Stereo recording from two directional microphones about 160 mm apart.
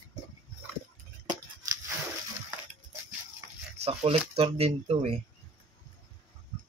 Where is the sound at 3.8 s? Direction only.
40° right (ahead or behind).